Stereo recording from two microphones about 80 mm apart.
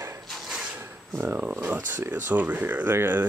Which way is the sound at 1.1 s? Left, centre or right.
Right.